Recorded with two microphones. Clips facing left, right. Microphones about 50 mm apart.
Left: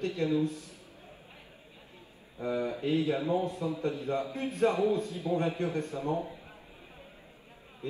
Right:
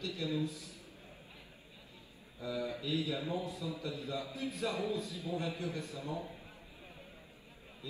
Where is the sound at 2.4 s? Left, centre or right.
Left.